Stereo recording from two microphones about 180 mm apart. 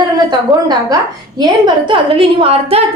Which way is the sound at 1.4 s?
25° right (ahead or behind).